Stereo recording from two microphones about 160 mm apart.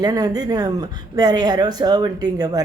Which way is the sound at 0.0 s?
25° right (ahead or behind).